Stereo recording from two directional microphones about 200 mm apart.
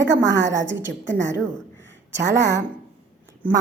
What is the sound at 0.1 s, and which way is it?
A woman's voice, 65° right (ahead or behind).